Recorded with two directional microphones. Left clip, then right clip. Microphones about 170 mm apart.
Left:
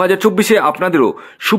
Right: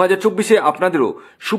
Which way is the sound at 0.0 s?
25° left (ahead or behind).